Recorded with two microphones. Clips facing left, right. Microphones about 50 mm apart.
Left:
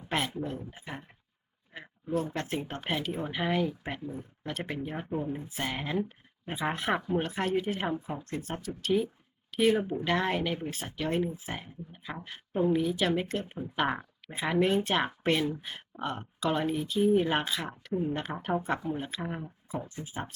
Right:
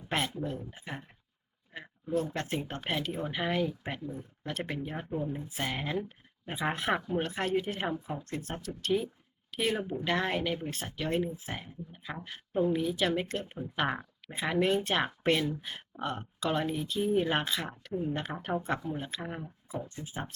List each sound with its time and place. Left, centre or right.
0.4 s speech: centre
5.1 s speech: centre
5.5 s speech: centre